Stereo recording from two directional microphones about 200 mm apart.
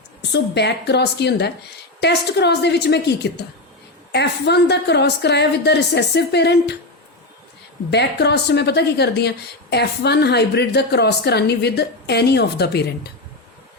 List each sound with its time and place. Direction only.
0.2 s speech: 55° left (ahead or behind)
7.9 s speech: 55° left (ahead or behind)